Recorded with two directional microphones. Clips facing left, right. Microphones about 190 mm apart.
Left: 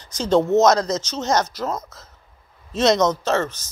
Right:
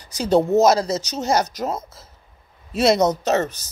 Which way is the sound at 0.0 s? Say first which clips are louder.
Even; 15° right (ahead or behind).